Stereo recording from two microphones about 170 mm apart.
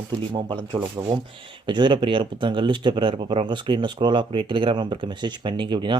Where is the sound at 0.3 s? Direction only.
30° right (ahead or behind).